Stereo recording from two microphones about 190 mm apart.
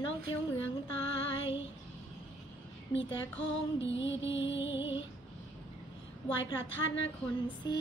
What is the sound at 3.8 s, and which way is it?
Music, 75° left (ahead or behind).